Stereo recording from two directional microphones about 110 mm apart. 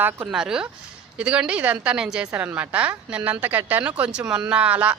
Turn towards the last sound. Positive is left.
turn(degrees=-10)  # may be behind; listen again after turning